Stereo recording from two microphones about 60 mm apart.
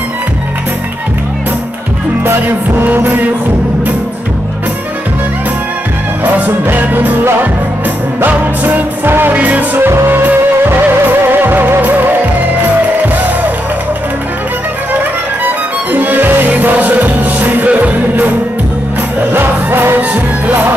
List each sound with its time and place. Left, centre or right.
2.2 s music: right
6.2 s music: right
9.8 s music: right
15.4 s music: right
19.3 s music: right
20.0 s music: right